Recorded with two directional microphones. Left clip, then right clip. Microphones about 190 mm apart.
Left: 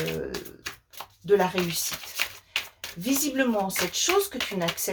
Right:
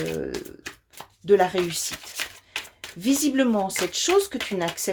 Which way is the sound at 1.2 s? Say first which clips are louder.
Right 3 dB; 45° right (ahead or behind).